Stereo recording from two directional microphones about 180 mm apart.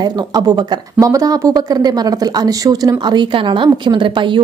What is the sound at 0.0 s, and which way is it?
Speech, 20° right (ahead or behind).